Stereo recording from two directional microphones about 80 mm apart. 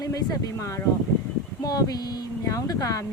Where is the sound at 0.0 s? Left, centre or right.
Left.